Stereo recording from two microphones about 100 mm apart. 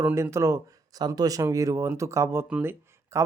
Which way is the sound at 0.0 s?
25° right (ahead or behind).